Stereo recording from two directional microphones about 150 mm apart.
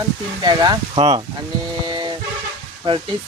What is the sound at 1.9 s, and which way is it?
Music, 30° right (ahead or behind).